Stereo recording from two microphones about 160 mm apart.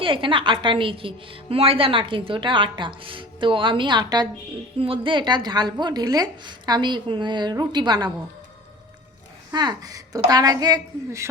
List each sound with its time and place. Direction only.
0.0 s a woman's voice: 30° right (ahead or behind)
9.5 s a woman's voice: 25° right (ahead or behind)